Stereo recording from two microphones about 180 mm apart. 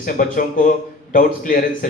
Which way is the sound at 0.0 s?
50° left (ahead or behind).